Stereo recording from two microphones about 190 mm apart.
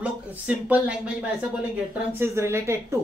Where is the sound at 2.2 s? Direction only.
15° right (ahead or behind).